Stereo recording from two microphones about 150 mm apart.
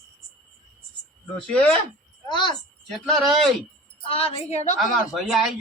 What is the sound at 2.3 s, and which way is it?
Speech, 30° left (ahead or behind).